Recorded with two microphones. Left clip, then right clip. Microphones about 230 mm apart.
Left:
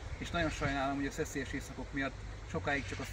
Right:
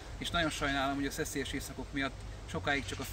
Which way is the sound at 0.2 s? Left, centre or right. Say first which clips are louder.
Right 3 dB; centre.